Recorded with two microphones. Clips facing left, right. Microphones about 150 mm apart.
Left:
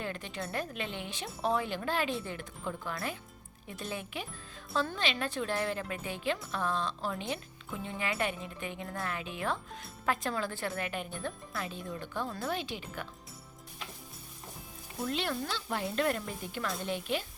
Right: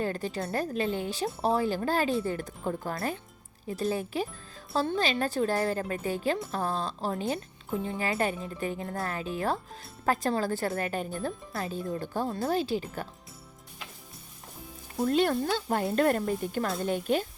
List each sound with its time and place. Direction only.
0.0 s a woman's voice: 35° right (ahead or behind)
15.0 s speech: 45° right (ahead or behind)